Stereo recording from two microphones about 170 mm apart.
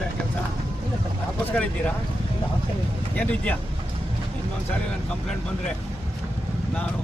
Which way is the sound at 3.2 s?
10° left (ahead or behind).